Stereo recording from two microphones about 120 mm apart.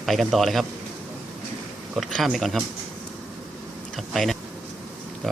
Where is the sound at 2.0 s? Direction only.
Centre (ahead or behind).